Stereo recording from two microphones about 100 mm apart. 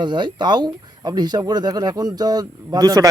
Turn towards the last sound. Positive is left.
turn(degrees=-40)  # may be behind; listen again after turning